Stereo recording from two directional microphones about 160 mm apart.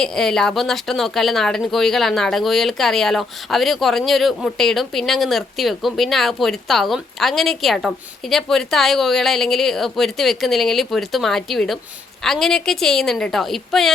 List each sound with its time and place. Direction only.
0.0 s speech: 5° left (ahead or behind)